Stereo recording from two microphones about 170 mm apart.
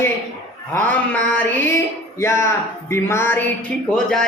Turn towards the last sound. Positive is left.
turn(degrees=5)  # may be behind; listen again after turning